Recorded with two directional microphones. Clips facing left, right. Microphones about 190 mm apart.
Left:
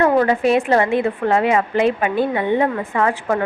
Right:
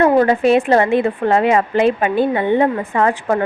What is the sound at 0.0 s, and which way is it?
A woman's voice, 30° right (ahead or behind).